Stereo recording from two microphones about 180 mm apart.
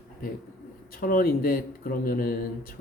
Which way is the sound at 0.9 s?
55° left (ahead or behind).